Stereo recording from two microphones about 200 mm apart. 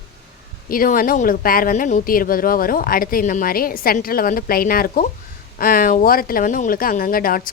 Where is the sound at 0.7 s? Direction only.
45° left (ahead or behind).